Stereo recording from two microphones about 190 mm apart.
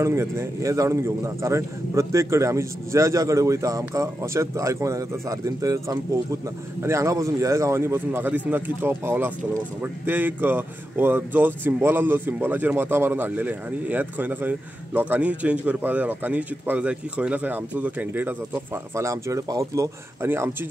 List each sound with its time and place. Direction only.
0.0 s speech: 15° right (ahead or behind)